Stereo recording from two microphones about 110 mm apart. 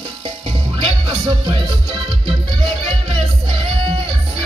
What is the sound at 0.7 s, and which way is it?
Music, 55° right (ahead or behind).